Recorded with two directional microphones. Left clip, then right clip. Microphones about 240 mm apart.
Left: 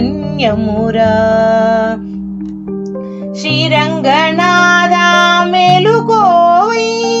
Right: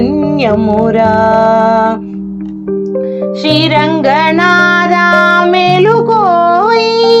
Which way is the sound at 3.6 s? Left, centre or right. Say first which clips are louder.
Even; centre.